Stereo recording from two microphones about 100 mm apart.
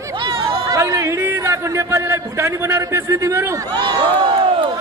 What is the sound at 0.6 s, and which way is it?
A man's voice, 30° right (ahead or behind).